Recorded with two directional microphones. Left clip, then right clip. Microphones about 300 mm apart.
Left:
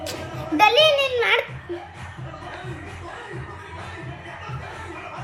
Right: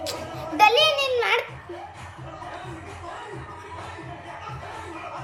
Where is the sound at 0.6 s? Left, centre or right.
Centre.